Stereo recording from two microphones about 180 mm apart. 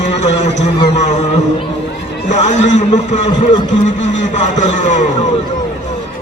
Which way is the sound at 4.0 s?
40° left (ahead or behind).